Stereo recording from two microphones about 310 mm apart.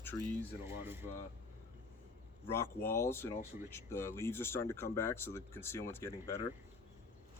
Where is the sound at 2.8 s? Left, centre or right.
Centre.